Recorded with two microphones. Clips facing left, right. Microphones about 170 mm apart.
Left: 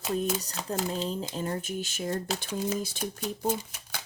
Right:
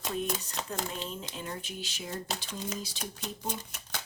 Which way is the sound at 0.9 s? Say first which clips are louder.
Left 7 dB; 35° left (ahead or behind).